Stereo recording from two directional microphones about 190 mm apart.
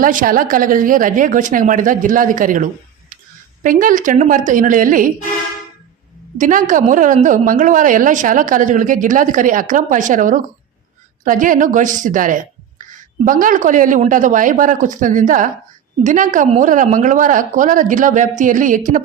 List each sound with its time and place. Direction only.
0.0 s a woman's voice: 45° right (ahead or behind)
6.3 s a woman's voice: 45° right (ahead or behind)